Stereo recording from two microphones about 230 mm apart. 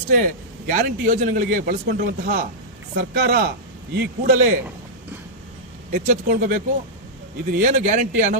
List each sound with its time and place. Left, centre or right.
0.1 s a man's voice: right
5.9 s a man's voice: right